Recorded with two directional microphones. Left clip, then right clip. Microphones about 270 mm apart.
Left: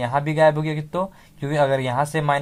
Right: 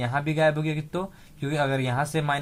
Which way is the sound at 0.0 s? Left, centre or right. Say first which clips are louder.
Left 6 dB; left.